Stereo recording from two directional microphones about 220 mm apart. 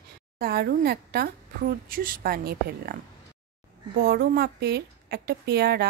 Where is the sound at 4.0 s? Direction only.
40° right (ahead or behind).